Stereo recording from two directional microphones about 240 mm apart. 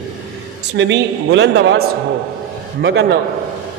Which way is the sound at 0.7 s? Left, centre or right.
Right.